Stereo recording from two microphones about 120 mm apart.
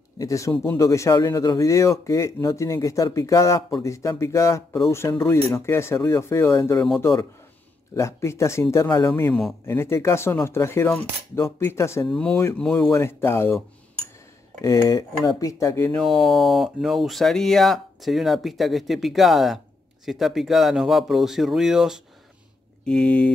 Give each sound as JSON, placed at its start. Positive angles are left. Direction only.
{"t": 0.2, "sound": "speech", "side_deg": 25}
{"t": 9.1, "sound": "a sound", "side_deg": 15}
{"t": 9.7, "sound": "speech", "side_deg": 20}
{"t": 12.1, "sound": "speech", "side_deg": 5}
{"t": 12.9, "sound": "speech", "side_deg": 20}
{"t": 14.9, "sound": "speech", "side_deg": 30}
{"t": 15.9, "sound": "speech", "side_deg": 0}
{"t": 22.8, "sound": "a sound", "side_deg": 10}